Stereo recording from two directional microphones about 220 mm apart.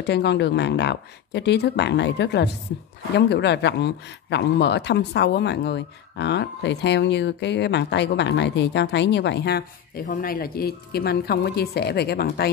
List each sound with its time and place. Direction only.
0.0 s speech: 50° left (ahead or behind)